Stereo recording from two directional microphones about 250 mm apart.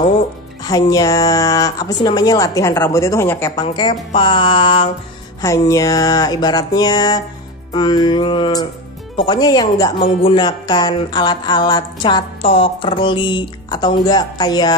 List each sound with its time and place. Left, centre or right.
0.7 s speech: centre